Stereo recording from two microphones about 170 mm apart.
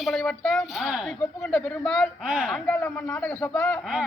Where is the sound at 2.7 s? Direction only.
5° left (ahead or behind).